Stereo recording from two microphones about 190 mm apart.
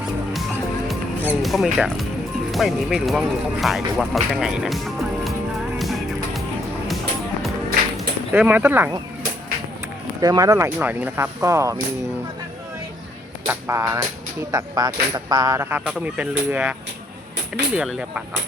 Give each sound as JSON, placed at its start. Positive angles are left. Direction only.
{"t": 1.2, "sound": "speech", "side_deg": -5}
{"t": 5.8, "sound": "music", "side_deg": 0}
{"t": 7.9, "sound": "speech", "side_deg": -10}
{"t": 10.2, "sound": "speech", "side_deg": -20}
{"t": 13.5, "sound": "speech", "side_deg": -15}
{"t": 17.7, "sound": "speech", "side_deg": -5}